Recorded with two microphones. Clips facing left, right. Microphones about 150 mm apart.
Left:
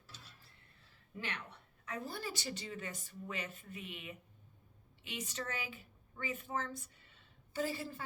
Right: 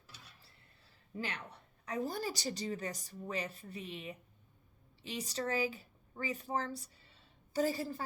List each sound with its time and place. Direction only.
1.1 s a woman's voice: 35° right (ahead or behind)